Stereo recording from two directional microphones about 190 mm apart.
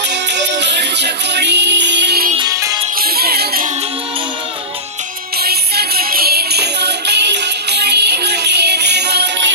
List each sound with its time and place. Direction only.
0.1 s music: 65° right (ahead or behind)
2.4 s music: 15° right (ahead or behind)
3.0 s music: 55° right (ahead or behind)
5.4 s music: 55° right (ahead or behind)